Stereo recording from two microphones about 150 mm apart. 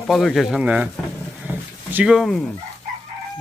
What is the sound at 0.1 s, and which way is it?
Speech, centre (ahead or behind).